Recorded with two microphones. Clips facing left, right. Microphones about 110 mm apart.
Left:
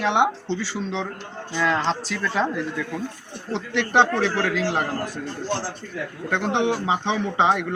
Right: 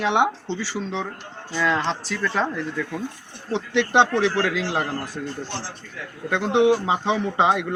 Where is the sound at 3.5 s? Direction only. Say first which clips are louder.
Right 1 dB; 15° right (ahead or behind).